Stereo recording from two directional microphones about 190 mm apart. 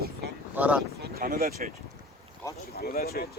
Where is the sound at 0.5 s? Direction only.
10° right (ahead or behind).